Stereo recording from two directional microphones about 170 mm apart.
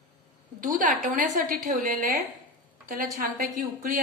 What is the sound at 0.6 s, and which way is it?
A woman's voice, 50° right (ahead or behind).